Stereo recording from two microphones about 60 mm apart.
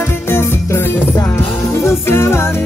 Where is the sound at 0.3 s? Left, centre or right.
Left.